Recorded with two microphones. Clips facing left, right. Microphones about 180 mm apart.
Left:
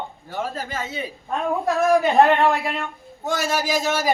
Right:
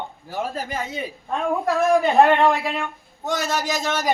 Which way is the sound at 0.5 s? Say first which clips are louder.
Right 1 dB; 15° right (ahead or behind).